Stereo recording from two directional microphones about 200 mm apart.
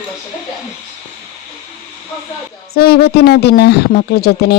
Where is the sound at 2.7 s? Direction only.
50° left (ahead or behind).